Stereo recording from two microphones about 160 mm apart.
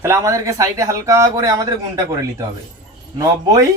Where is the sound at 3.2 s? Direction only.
20° right (ahead or behind).